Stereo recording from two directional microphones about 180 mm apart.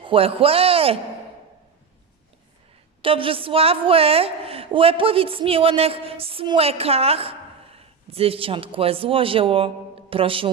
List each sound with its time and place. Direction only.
0.0 s a woman's voice: 30° right (ahead or behind)
3.0 s a woman's voice: 30° right (ahead or behind)